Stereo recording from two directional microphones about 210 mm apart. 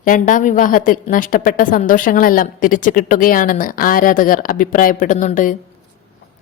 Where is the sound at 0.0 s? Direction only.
40° left (ahead or behind).